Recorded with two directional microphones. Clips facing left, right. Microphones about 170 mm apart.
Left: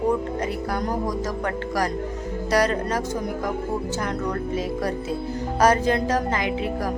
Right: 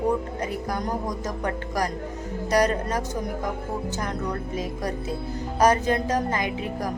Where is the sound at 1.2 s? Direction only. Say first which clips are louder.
Left 2 dB; 15° right (ahead or behind).